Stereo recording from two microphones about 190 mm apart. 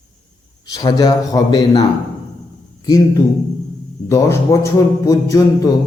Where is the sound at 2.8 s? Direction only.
20° left (ahead or behind).